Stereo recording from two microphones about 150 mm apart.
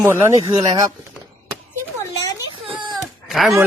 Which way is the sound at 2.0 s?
25° left (ahead or behind).